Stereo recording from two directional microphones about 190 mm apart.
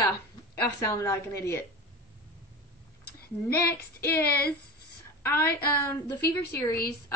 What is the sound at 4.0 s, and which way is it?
Speech, 15° left (ahead or behind).